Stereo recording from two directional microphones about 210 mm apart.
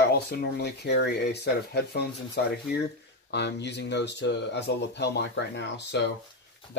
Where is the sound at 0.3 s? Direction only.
50° left (ahead or behind).